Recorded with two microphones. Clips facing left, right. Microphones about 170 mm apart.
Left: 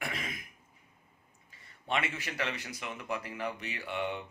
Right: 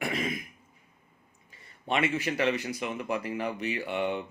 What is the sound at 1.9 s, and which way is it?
A man's voice, 15° right (ahead or behind).